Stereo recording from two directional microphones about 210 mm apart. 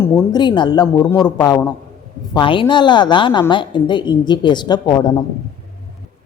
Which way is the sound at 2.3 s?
25° left (ahead or behind).